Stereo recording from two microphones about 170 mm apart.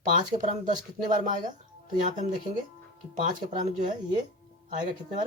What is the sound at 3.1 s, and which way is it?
Speech, 50° right (ahead or behind).